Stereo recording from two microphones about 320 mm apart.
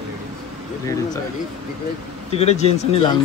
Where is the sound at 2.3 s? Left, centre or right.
Centre.